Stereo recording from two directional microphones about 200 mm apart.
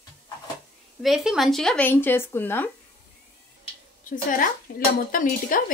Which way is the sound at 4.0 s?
40° left (ahead or behind).